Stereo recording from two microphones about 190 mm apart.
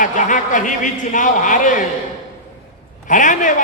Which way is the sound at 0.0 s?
40° left (ahead or behind).